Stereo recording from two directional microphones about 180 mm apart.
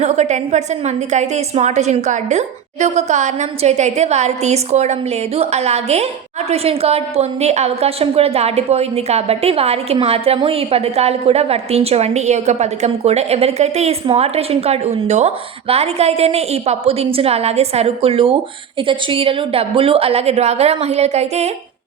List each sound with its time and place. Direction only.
0.0 s a woman's voice: 40° right (ahead or behind)